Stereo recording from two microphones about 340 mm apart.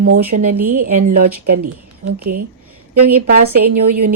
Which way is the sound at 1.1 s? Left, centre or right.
Right.